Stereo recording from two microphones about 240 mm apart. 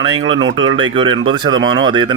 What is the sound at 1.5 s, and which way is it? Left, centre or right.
Speech, right.